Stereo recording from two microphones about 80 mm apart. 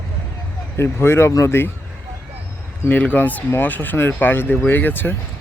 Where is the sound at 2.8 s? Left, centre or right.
Centre.